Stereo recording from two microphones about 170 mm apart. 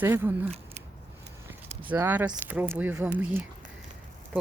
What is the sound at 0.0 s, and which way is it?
Speech, 15° right (ahead or behind).